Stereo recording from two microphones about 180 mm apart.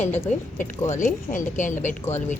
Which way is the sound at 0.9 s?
45° left (ahead or behind).